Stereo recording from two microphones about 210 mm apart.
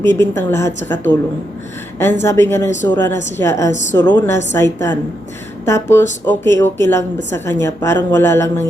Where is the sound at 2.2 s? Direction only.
10° left (ahead or behind).